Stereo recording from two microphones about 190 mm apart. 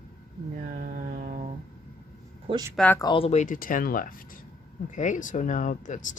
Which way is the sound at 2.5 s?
20° right (ahead or behind).